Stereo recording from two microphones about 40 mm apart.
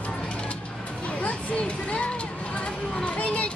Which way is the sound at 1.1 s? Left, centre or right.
Left.